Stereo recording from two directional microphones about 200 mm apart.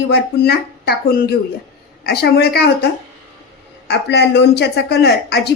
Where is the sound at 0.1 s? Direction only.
50° left (ahead or behind).